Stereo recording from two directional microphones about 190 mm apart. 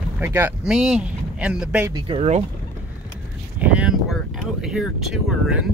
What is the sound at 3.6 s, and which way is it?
Speech, 5° right (ahead or behind).